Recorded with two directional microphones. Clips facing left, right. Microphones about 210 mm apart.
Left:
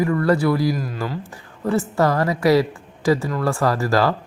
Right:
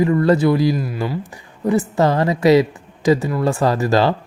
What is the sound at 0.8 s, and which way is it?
A woman's voice, 10° right (ahead or behind).